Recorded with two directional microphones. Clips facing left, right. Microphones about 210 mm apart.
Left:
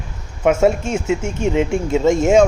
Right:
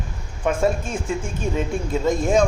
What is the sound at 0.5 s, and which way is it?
Speech, 25° left (ahead or behind).